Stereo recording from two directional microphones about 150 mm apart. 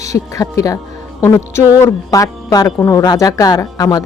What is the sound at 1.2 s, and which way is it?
Music, 15° left (ahead or behind).